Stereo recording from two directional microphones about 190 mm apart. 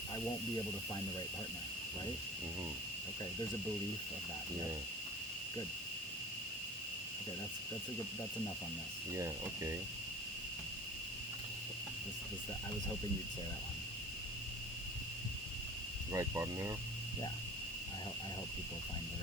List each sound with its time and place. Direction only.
9.1 s speech: 15° right (ahead or behind)
16.1 s speech: 15° right (ahead or behind)